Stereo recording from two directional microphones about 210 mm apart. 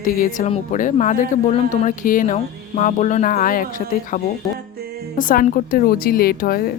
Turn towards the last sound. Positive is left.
turn(degrees=45)  # may be behind; listen again after turning